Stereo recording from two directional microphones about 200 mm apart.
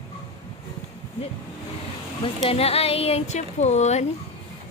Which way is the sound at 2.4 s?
30° left (ahead or behind).